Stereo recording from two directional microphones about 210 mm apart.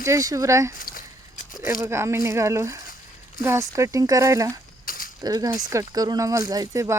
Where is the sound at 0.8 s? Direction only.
40° left (ahead or behind).